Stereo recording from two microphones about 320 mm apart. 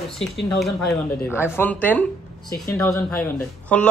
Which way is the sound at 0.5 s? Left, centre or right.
Centre.